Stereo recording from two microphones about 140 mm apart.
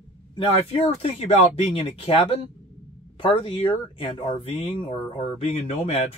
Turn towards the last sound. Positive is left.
turn(degrees=45)  # may be behind; listen again after turning